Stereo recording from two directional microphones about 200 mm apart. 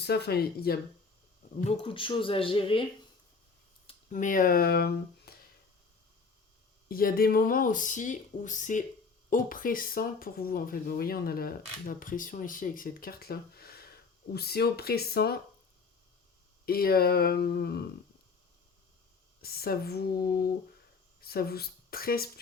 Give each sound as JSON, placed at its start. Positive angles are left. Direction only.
{"t": 0.0, "sound": "speech", "side_deg": 55}
{"t": 1.6, "sound": "speech", "side_deg": 30}
{"t": 4.1, "sound": "speech", "side_deg": 40}
{"t": 6.8, "sound": "speech", "side_deg": 45}
{"t": 16.6, "sound": "speech", "side_deg": 50}
{"t": 19.4, "sound": "speech", "side_deg": 50}